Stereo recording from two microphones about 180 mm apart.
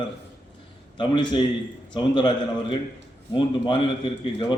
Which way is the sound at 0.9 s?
25° left (ahead or behind).